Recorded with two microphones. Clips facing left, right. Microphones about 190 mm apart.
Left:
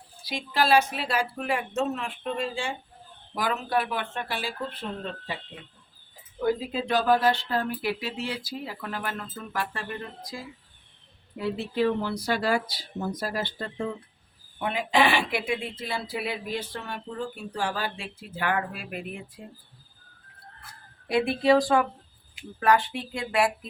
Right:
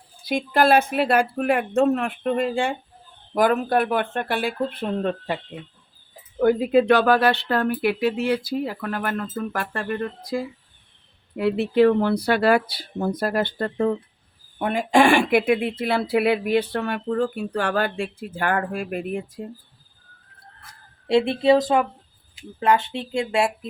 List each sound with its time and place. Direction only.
0.3 s speech: 55° right (ahead or behind)
6.4 s speech: 60° right (ahead or behind)
14.6 s speech: 45° right (ahead or behind)
21.1 s speech: 25° right (ahead or behind)